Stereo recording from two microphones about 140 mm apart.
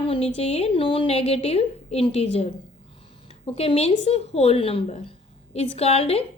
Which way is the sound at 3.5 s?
45° left (ahead or behind).